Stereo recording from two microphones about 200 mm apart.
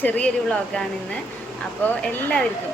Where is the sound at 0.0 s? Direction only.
5° left (ahead or behind).